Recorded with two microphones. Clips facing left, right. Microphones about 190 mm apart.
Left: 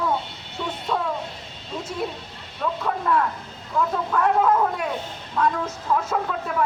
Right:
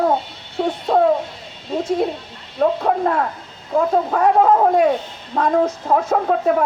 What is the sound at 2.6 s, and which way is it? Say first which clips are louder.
A woman's voice: right 9 dB; 50° right (ahead or behind).